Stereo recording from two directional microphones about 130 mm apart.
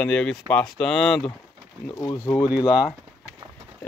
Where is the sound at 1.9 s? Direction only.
25° left (ahead or behind).